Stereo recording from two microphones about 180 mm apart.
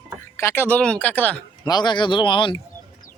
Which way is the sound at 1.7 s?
25° left (ahead or behind).